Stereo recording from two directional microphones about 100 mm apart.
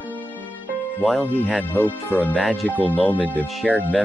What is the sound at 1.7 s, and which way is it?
Speech, 20° left (ahead or behind).